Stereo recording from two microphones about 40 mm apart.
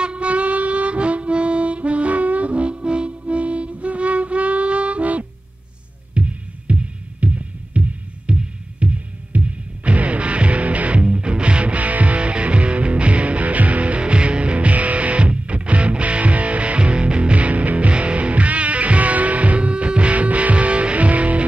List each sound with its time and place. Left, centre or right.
0.0 s harmonica: right
6.1 s music: right